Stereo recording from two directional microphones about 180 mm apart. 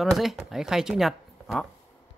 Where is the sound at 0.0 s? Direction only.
Centre (ahead or behind).